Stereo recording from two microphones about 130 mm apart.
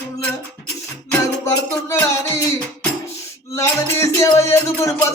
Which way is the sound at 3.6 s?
20° left (ahead or behind).